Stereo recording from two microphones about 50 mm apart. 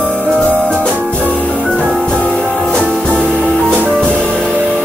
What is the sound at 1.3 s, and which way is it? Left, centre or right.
Music, left.